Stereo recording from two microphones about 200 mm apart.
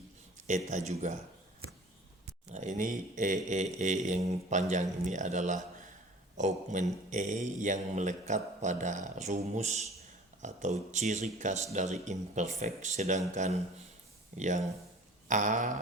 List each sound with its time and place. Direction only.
0.4 s speech: 35° right (ahead or behind)
2.5 s speech: 35° right (ahead or behind)